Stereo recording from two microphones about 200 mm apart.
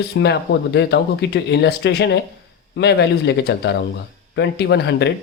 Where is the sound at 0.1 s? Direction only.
60° left (ahead or behind).